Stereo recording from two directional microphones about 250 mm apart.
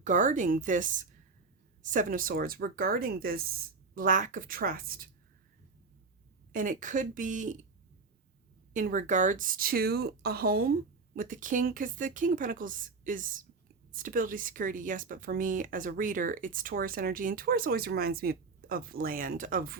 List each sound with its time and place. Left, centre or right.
0.0 s speech: right
6.5 s speech: right
8.7 s speech: right